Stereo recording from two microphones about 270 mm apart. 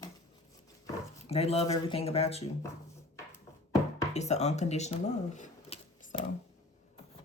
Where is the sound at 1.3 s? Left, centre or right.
Left.